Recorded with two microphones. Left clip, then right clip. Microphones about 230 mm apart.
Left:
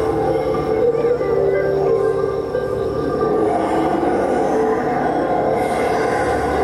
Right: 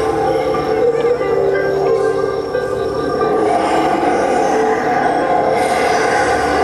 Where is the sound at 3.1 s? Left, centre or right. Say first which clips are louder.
Right 3 dB; centre.